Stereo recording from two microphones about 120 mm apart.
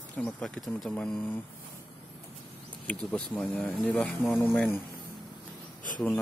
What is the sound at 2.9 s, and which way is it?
Speech, 10° left (ahead or behind).